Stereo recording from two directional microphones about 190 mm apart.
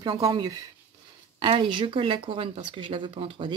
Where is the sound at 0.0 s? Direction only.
25° right (ahead or behind).